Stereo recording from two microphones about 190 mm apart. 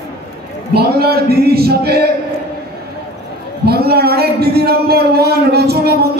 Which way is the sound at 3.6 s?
55° right (ahead or behind).